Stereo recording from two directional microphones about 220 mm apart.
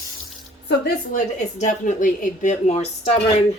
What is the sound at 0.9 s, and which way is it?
Speech, 35° left (ahead or behind).